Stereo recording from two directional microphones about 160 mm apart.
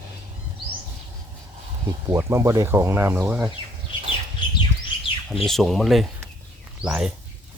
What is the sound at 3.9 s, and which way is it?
Bird flight, 30° left (ahead or behind).